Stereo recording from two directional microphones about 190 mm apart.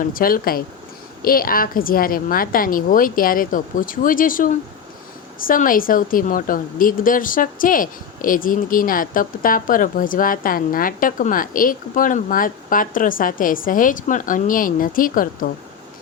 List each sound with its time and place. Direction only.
0.0 s speech: 50° left (ahead or behind)